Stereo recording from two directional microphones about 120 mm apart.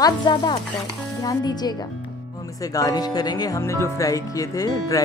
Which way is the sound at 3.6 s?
25° left (ahead or behind).